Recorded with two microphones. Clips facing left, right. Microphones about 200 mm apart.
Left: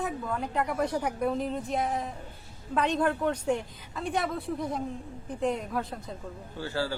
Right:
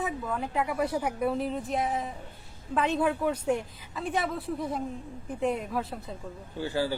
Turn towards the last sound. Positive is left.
turn(degrees=-15)  # may be behind; listen again after turning